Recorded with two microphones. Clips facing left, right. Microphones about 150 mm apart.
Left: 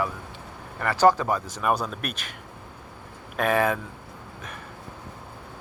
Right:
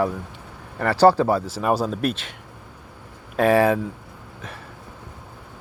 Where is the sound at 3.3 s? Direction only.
30° right (ahead or behind).